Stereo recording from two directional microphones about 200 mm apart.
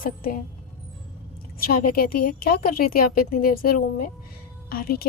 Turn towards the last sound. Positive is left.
turn(degrees=50)  # may be behind; listen again after turning